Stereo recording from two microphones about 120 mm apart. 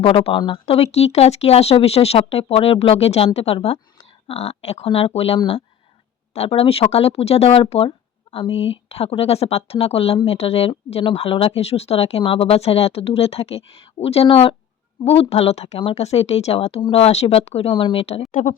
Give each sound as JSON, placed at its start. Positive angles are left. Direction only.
{"t": 0.0, "sound": "speech", "side_deg": 50}
{"t": 0.8, "sound": "speech", "side_deg": 60}